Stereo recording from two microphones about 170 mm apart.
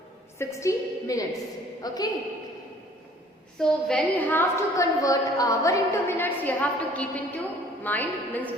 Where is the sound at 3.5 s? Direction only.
5° left (ahead or behind).